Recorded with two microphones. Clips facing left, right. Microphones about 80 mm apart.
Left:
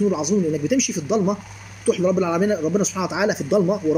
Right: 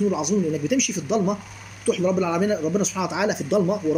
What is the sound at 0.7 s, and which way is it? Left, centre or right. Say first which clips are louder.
Speech: left 2 dB; centre.